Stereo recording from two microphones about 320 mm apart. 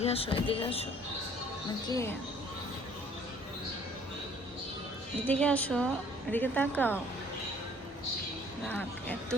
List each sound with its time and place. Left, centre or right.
0.0 s speech: centre
1.9 s speech: centre
5.2 s a woman's voice: centre
8.6 s a woman's voice: centre